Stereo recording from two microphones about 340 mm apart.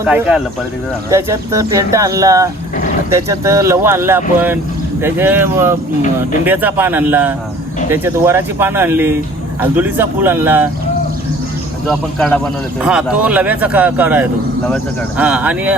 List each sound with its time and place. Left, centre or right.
0.0 s speech: centre
11.9 s speech: centre